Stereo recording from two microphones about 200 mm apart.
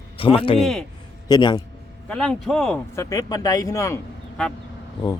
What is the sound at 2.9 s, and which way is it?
Speech, 15° left (ahead or behind).